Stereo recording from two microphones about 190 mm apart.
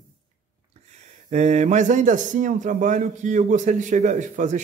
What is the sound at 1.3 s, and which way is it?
A man's voice, 35° right (ahead or behind).